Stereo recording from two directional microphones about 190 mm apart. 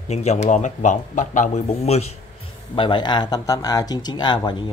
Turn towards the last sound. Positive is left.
turn(degrees=20)  # may be behind; listen again after turning